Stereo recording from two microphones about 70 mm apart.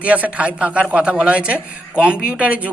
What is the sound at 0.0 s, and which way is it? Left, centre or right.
Speech, right.